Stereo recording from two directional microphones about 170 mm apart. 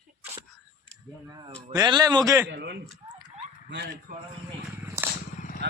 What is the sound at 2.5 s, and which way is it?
Speech, 75° right (ahead or behind).